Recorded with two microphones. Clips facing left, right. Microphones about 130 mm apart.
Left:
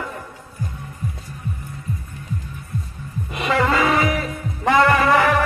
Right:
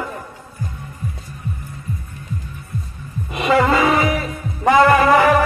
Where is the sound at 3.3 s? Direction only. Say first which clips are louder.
Right 4 dB; 10° right (ahead or behind).